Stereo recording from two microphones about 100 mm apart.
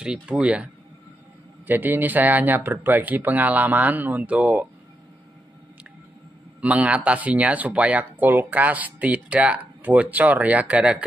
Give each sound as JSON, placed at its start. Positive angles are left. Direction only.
{"t": 0.0, "sound": "speech", "side_deg": -10}
{"t": 1.7, "sound": "speech", "side_deg": -20}
{"t": 6.6, "sound": "speech", "side_deg": -15}